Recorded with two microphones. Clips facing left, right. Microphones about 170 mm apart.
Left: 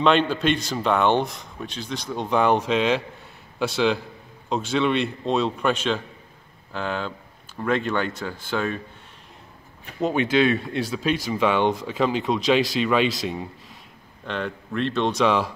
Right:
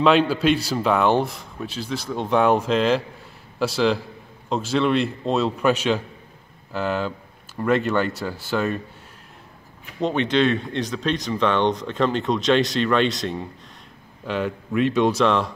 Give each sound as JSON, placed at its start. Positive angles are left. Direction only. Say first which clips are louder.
{"t": 0.0, "sound": "a man's voice", "louder": "right 2 dB", "side_deg": -5}
{"t": 9.9, "sound": "speech", "louder": "even", "side_deg": 5}
{"t": 15.2, "sound": "speech", "louder": "right 1 dB", "side_deg": 5}